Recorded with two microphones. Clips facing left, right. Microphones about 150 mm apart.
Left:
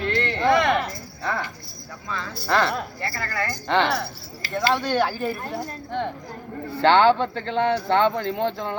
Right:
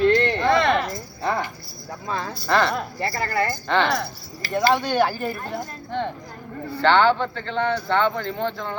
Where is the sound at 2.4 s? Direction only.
5° left (ahead or behind).